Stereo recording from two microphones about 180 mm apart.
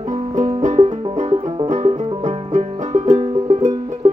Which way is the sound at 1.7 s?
40° right (ahead or behind).